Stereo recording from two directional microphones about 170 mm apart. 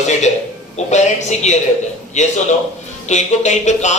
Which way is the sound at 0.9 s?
40° left (ahead or behind).